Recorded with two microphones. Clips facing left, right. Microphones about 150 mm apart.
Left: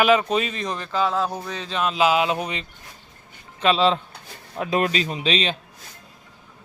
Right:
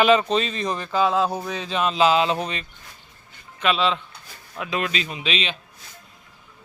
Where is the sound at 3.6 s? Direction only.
35° left (ahead or behind).